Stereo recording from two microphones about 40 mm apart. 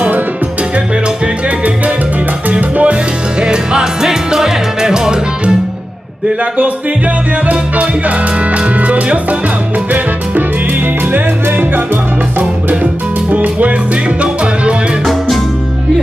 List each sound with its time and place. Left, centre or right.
1.2 s salsa music: right
2.7 s music: right
3.3 s music: right
7.4 s music: right
11.1 s music: right
12.8 s music: right
14.2 s music: right